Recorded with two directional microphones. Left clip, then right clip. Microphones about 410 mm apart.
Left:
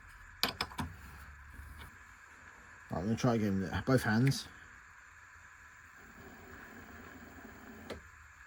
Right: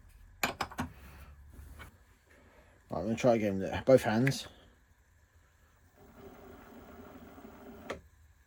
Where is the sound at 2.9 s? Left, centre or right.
Centre.